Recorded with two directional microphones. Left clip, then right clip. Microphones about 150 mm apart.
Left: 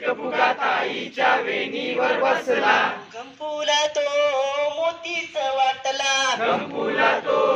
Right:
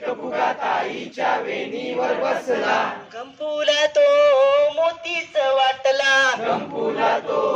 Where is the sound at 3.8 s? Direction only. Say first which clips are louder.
Right 6 dB; 5° right (ahead or behind).